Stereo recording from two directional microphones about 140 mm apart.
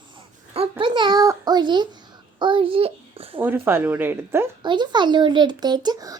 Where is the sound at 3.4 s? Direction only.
15° right (ahead or behind).